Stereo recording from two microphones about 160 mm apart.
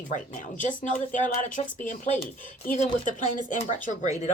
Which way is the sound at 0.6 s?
55° left (ahead or behind).